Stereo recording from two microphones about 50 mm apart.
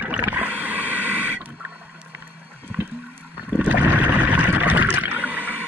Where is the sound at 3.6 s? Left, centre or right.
Right.